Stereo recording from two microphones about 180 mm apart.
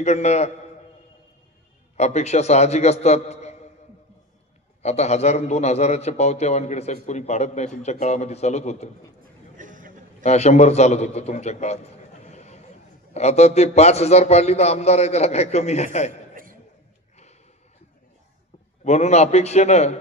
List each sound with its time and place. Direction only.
0.0 s a man's voice: 40° left (ahead or behind)
2.0 s a man's voice: 40° left (ahead or behind)
4.8 s a man's voice: 40° left (ahead or behind)
9.2 s a sound: 45° right (ahead or behind)
10.2 s a man's voice: 40° left (ahead or behind)
18.9 s a man's voice: 40° left (ahead or behind)